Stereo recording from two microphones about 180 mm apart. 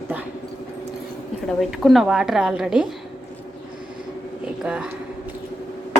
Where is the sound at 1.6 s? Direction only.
Centre (ahead or behind).